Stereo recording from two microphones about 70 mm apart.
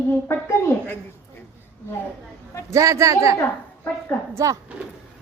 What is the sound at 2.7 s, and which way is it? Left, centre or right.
Speech, right.